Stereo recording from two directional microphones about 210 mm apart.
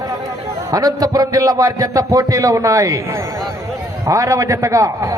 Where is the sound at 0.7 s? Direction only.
15° right (ahead or behind).